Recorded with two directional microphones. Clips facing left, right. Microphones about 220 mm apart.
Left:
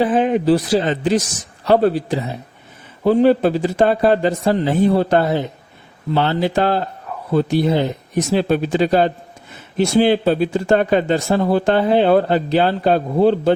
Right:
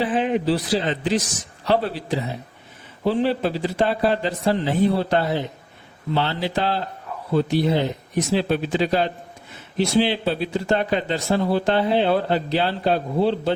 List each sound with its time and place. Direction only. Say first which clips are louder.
0.0 s speech: left 5 dB; 45° left (ahead or behind)